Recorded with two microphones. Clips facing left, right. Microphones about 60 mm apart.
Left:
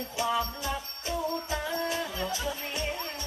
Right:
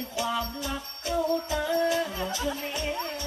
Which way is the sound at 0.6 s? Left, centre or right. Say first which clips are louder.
Even; left.